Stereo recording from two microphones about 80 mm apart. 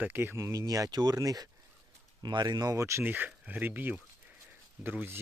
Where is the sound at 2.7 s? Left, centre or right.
Right.